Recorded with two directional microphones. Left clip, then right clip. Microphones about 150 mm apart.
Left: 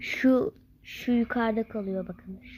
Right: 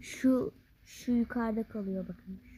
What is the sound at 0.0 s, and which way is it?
Speech, 20° right (ahead or behind).